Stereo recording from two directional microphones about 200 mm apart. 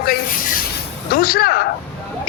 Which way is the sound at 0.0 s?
50° left (ahead or behind).